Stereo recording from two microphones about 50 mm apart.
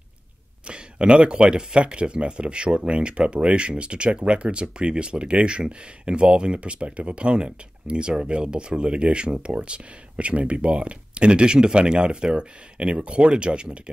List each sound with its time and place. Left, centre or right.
0.7 s speech: right